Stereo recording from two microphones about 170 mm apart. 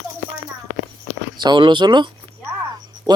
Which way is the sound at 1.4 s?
25° right (ahead or behind).